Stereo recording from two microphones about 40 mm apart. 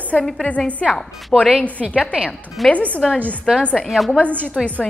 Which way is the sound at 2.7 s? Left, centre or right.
Left.